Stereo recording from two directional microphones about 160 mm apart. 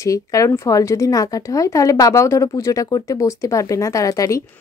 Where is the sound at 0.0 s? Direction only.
20° left (ahead or behind).